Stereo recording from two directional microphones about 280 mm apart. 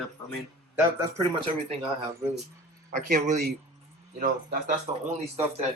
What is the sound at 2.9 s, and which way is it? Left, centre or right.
Speech, right.